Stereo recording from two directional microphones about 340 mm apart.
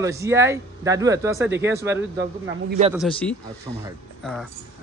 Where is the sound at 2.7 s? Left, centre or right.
Centre.